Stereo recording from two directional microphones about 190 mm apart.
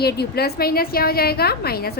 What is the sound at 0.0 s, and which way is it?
A woman's voice, 55° left (ahead or behind).